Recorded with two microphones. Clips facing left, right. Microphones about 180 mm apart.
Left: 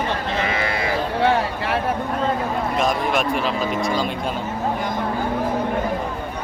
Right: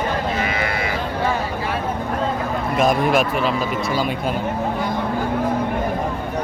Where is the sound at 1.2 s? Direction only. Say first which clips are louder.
Left 3 dB; 70° left (ahead or behind).